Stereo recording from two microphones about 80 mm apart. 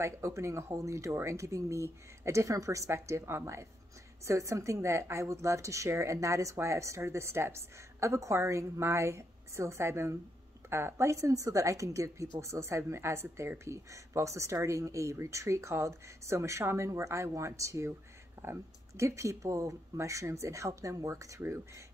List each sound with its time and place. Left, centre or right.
0.0 s speech: right